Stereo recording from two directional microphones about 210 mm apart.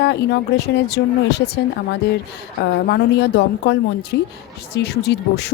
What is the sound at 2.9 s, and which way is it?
A woman's voice, 50° left (ahead or behind).